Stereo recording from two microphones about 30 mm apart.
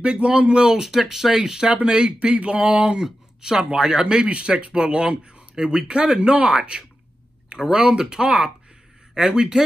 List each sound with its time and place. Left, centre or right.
0.0 s speech: right
0.8 s speech: centre
2.1 s a sound: right
3.0 s speech: centre
4.3 s speech: right
7.4 s a sound: right
7.8 s speech: right